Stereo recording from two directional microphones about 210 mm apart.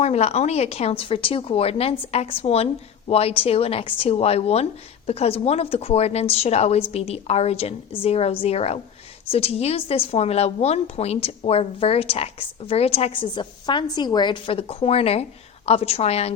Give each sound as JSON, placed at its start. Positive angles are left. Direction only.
{"t": 0.0, "sound": "a woman's voice", "side_deg": 30}